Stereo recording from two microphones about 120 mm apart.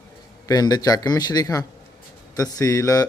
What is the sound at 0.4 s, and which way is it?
Speech, 35° left (ahead or behind).